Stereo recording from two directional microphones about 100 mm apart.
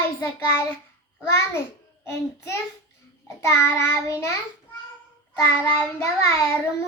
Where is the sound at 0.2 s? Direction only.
25° left (ahead or behind).